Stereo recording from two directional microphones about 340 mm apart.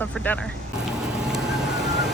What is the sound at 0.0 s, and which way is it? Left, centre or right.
Vehicle, centre.